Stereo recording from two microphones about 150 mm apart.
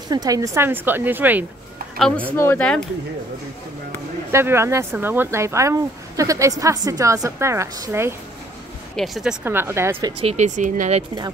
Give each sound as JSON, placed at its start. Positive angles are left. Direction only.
{"t": 0.1, "sound": "a woman's voice", "side_deg": -25}
{"t": 2.0, "sound": "speech", "side_deg": 5}
{"t": 2.3, "sound": "speech", "side_deg": 15}
{"t": 4.3, "sound": "speech", "side_deg": -15}
{"t": 8.9, "sound": "speech", "side_deg": 0}
{"t": 9.4, "sound": "a woman's voice", "side_deg": -15}
{"t": 10.2, "sound": "speech", "side_deg": -50}